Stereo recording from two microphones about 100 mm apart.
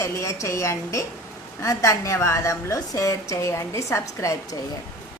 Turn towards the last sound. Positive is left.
turn(degrees=35)  # may be behind; listen again after turning